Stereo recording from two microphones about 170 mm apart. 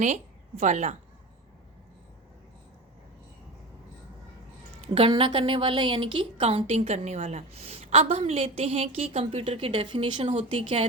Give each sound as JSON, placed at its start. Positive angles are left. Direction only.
{"t": 0.0, "sound": "a woman's voice", "side_deg": -45}
{"t": 4.9, "sound": "a woman's voice", "side_deg": -30}